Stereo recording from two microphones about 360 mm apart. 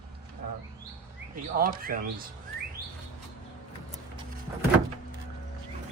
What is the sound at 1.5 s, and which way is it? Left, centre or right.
Speech, right.